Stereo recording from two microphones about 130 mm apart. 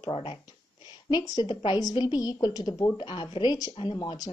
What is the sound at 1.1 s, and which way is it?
A woman's voice, 35° left (ahead or behind).